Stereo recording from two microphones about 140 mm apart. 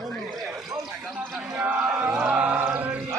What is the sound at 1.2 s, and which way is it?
Chant, 10° right (ahead or behind).